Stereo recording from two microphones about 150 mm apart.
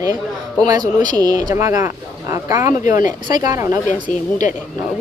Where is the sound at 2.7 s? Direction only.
60° left (ahead or behind).